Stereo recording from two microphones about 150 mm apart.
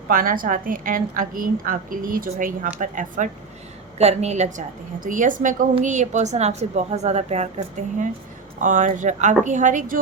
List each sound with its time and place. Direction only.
0.1 s a woman's voice: 65° right (ahead or behind)
3.9 s a woman's voice: 45° right (ahead or behind); by 10.0 s 60° right (ahead or behind)